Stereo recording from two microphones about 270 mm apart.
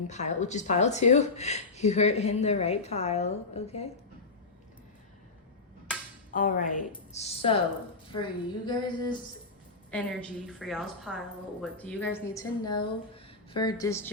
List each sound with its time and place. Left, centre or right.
0.1 s speech: left
6.3 s speech: left
9.9 s a woman's voice: centre